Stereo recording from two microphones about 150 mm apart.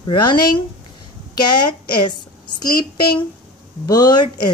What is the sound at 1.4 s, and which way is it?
A woman's voice, 30° left (ahead or behind).